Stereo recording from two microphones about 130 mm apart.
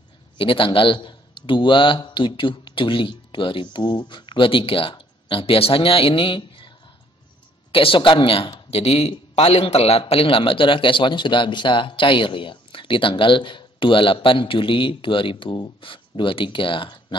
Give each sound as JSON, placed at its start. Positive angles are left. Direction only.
{"t": 0.4, "sound": "a man's voice", "side_deg": 40}
{"t": 7.7, "sound": "a man's voice", "side_deg": 45}
{"t": 8.6, "sound": "a man's voice", "side_deg": 50}